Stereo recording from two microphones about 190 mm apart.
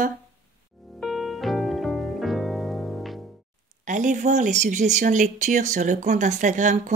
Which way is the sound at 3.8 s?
40° right (ahead or behind).